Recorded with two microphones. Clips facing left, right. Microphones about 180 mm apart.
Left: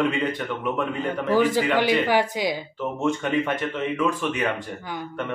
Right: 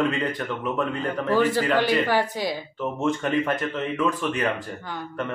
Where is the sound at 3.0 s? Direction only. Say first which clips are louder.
Even; centre (ahead or behind).